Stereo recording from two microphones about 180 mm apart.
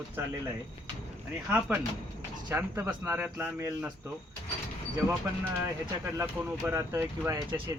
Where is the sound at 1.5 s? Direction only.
10° right (ahead or behind).